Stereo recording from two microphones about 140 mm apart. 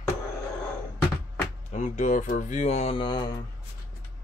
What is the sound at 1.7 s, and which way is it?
Speech, 60° left (ahead or behind).